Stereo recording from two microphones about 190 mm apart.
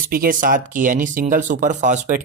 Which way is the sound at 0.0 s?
50° right (ahead or behind).